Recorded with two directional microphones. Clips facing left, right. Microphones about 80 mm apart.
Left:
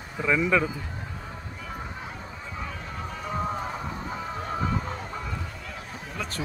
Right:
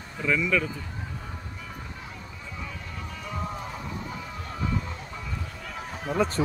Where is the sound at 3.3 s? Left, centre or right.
Left.